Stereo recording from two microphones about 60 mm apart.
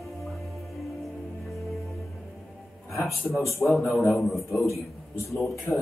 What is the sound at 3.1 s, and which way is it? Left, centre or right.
A man's voice, centre.